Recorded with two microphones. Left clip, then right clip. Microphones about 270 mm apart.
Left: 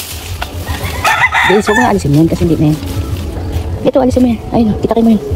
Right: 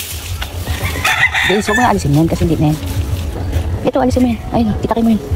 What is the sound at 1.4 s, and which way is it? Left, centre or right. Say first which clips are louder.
Chicken: left 5 dB; centre.